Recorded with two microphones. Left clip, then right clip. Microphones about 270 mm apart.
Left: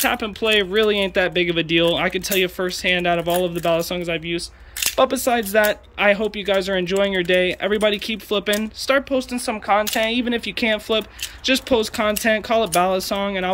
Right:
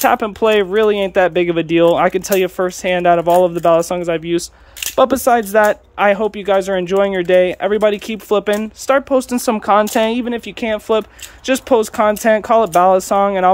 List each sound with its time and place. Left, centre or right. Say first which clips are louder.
0.0 s speech: right 7 dB; centre
5.2 s speech: right 6 dB; centre
9.3 s speech: right 5 dB; right
10.2 s speech: right 1 dB; centre